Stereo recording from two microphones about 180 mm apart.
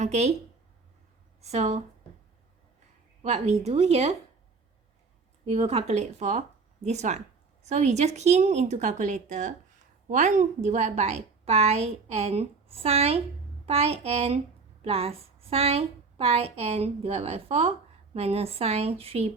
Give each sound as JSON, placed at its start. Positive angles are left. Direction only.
{"t": 0.0, "sound": "a woman's voice", "side_deg": -40}
{"t": 1.4, "sound": "a woman's voice", "side_deg": -40}
{"t": 3.2, "sound": "a woman's voice", "side_deg": -35}
{"t": 5.5, "sound": "a woman's voice", "side_deg": -35}